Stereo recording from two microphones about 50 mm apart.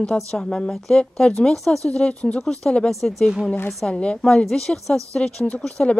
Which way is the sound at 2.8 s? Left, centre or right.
Centre.